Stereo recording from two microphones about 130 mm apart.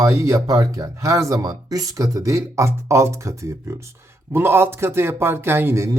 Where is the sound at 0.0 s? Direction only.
25° right (ahead or behind).